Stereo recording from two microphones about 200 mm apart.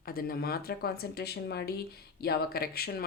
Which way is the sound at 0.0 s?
50° left (ahead or behind).